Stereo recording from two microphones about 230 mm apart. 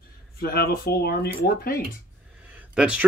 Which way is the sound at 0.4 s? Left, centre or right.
Left.